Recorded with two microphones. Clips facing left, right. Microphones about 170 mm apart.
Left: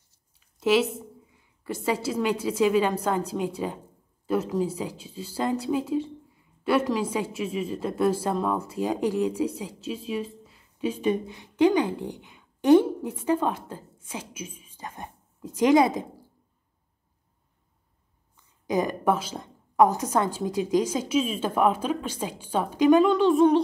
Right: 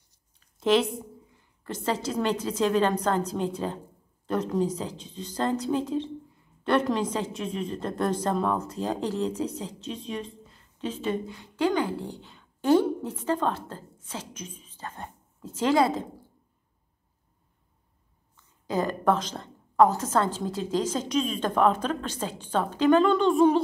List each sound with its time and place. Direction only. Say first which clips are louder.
0.6 s a woman's voice: left 1 dB; 5° left (ahead or behind)
18.3 s a woman's voice: left 3 dB; 15° left (ahead or behind)
23.0 s speech: left 1 dB; centre (ahead or behind)